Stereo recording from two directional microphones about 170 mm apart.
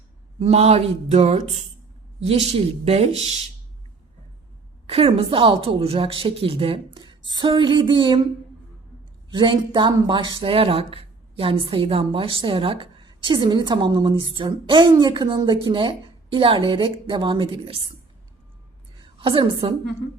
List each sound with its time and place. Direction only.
0.3 s a woman's voice: 35° right (ahead or behind)
4.9 s a woman's voice: 35° right (ahead or behind)
9.3 s speech: 30° right (ahead or behind)
19.2 s a woman's voice: 30° right (ahead or behind)